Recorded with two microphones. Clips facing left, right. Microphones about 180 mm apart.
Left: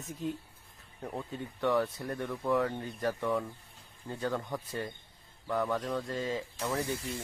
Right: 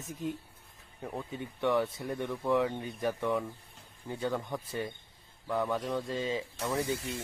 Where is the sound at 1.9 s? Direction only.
20° right (ahead or behind).